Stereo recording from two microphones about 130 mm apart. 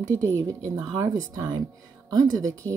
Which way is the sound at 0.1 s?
20° right (ahead or behind).